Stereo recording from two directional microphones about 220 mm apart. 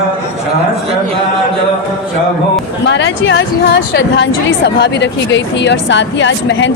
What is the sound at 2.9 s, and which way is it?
A woman's voice, 55° left (ahead or behind).